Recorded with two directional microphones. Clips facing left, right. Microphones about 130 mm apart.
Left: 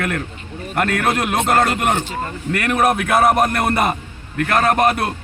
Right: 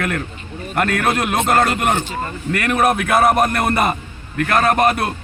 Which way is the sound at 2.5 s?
15° left (ahead or behind).